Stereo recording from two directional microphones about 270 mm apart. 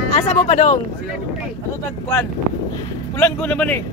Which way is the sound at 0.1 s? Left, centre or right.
Left.